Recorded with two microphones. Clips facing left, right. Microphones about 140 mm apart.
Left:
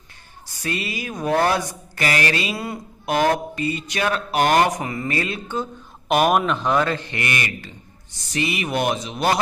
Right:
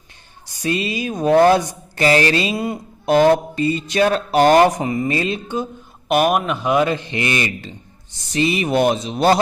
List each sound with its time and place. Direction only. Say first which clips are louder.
0.6 s speech: right 6 dB; 20° right (ahead or behind)
6.1 s a man's voice: right 1 dB; 5° right (ahead or behind); by 9.4 s 30° right (ahead or behind)